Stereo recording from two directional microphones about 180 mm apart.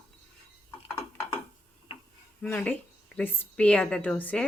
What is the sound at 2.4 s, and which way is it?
A woman's voice, 10° left (ahead or behind).